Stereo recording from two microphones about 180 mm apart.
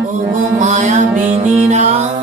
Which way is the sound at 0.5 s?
40° right (ahead or behind).